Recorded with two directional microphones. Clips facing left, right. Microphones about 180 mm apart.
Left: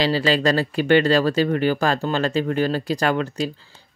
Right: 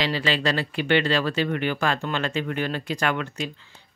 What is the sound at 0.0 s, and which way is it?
Speech, 35° left (ahead or behind).